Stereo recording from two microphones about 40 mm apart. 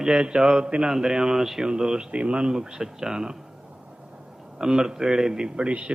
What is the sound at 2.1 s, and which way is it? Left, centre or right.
Speech, right.